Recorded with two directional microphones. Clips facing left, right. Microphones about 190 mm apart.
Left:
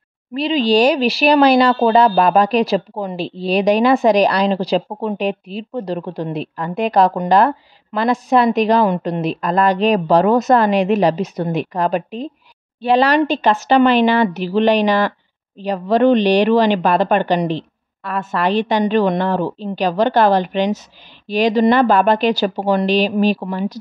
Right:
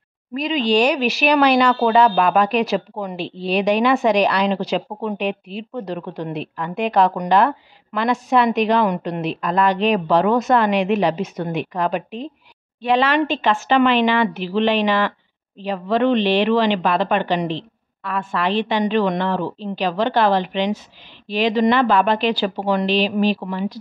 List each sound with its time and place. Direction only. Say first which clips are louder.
0.3 s speech: left 3 dB; 30° left (ahead or behind)